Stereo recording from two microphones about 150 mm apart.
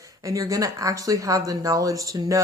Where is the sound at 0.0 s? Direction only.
20° right (ahead or behind).